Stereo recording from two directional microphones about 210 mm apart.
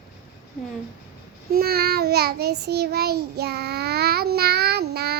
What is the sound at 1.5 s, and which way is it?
Child singing, 45° right (ahead or behind).